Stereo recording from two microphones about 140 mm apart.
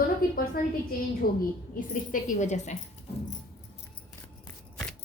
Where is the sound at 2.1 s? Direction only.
65° left (ahead or behind).